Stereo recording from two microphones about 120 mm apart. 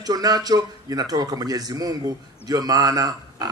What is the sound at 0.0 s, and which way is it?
Speech, 30° right (ahead or behind).